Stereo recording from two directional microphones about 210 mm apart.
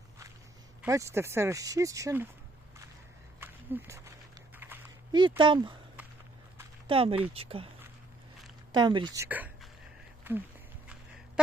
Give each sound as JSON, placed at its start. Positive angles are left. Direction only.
{"t": 0.8, "sound": "speech", "side_deg": -15}
{"t": 3.4, "sound": "a sound", "side_deg": -10}
{"t": 5.4, "sound": "speech", "side_deg": -20}
{"t": 6.8, "sound": "speech", "side_deg": -25}
{"t": 8.7, "sound": "a woman's voice", "side_deg": -20}